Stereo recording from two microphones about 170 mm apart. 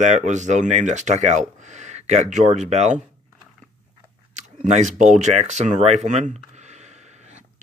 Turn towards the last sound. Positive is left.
turn(degrees=-40)  # may be behind; listen again after turning